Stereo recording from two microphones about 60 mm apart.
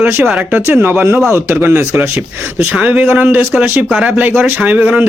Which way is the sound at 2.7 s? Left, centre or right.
Centre.